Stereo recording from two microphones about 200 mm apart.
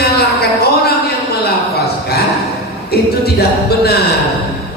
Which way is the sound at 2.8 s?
50° left (ahead or behind).